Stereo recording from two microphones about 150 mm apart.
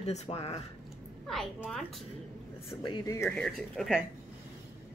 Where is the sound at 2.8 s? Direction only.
30° left (ahead or behind).